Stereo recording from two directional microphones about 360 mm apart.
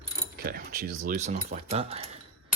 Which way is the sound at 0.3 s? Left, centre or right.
Right.